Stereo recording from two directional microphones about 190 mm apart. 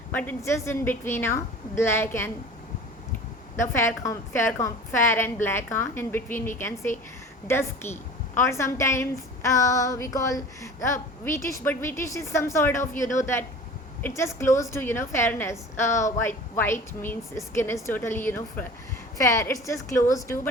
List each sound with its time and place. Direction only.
0.1 s a woman's voice: 10° left (ahead or behind)
3.6 s a woman's voice: 15° left (ahead or behind)